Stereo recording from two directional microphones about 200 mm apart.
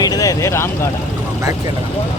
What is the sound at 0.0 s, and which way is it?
Vehicle, 20° left (ahead or behind).